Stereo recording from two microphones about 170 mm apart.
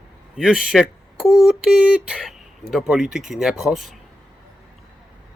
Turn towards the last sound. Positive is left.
turn(degrees=0)  # may be behind; listen again after turning